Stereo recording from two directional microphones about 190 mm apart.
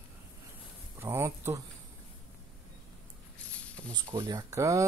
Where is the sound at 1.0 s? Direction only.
15° right (ahead or behind).